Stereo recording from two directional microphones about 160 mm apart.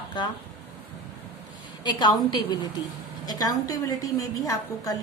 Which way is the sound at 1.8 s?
25° left (ahead or behind).